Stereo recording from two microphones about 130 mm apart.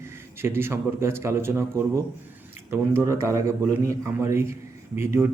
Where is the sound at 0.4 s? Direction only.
20° right (ahead or behind).